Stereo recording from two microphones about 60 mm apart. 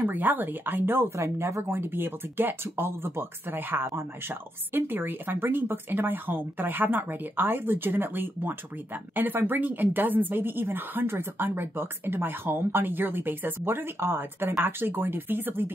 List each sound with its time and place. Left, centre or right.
0.0 s speech: right
1.1 s speech: right